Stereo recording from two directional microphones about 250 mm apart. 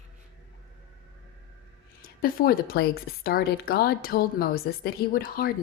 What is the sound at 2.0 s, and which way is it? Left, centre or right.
Speech, left.